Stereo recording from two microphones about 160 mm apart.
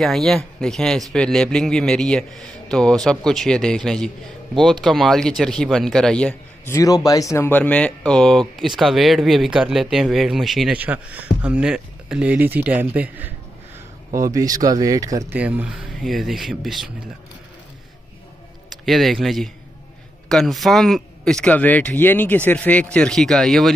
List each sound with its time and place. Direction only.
0.0 s speech: centre (ahead or behind)
6.7 s a man's voice: 20° left (ahead or behind); by 13.3 s 10° right (ahead or behind)
14.1 s speech: 20° right (ahead or behind)
15.3 s speech: 10° right (ahead or behind)
18.9 s speech: centre (ahead or behind)